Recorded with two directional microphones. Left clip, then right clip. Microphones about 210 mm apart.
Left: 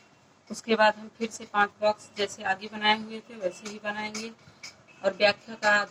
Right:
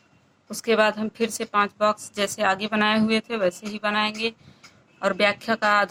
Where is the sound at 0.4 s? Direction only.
40° right (ahead or behind).